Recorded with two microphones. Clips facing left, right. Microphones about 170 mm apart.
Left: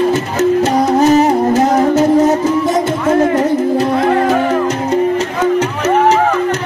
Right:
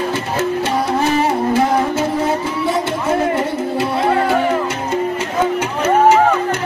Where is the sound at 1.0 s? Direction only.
40° left (ahead or behind).